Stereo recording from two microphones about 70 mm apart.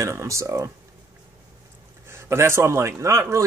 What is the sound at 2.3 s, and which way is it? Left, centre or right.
A man's voice, right.